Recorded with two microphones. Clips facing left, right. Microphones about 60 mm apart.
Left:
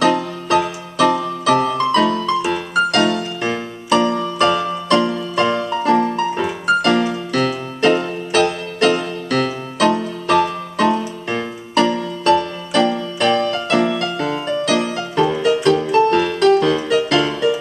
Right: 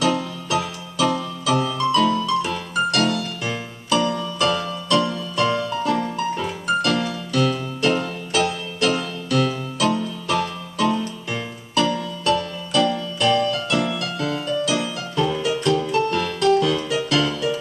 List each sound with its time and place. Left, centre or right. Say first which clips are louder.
0.0 s music: left 5 dB; left